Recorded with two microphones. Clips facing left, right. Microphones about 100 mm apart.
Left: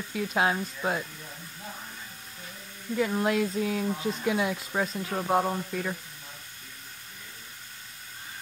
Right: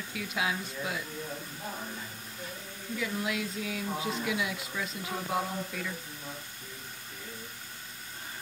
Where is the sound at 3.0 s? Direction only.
45° left (ahead or behind).